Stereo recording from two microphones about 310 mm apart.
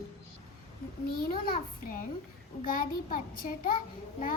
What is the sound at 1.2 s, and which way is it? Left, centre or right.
Child singing, left.